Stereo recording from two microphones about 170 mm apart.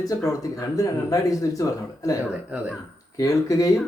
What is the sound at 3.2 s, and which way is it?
Speech, 20° left (ahead or behind).